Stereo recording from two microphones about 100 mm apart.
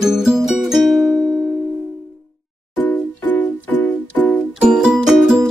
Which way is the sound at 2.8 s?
15° left (ahead or behind).